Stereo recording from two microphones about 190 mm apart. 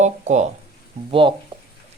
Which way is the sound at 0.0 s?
40° right (ahead or behind).